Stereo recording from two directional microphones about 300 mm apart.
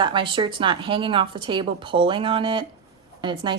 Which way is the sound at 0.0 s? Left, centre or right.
Centre.